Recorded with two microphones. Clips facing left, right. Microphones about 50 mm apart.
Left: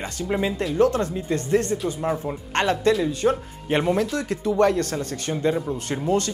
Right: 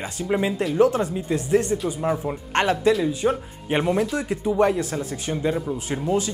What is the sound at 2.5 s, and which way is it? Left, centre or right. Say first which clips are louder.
Speech: right 1 dB; centre.